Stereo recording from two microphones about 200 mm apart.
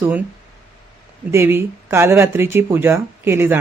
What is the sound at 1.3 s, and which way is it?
Speech, 10° right (ahead or behind).